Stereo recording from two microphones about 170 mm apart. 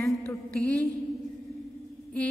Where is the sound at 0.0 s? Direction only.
15° left (ahead or behind).